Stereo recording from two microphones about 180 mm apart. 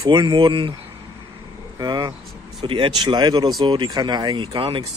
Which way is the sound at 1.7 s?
20° right (ahead or behind).